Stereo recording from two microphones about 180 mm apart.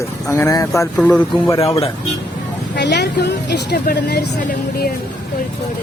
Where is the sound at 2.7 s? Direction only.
70° left (ahead or behind).